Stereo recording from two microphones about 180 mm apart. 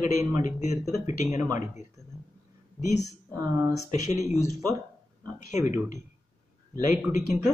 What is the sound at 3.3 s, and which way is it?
Speech, 20° right (ahead or behind).